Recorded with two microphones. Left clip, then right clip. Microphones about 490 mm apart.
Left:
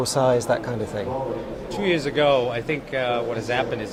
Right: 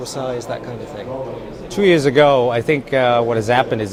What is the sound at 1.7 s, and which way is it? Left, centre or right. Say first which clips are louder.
Speech: right 10 dB; right.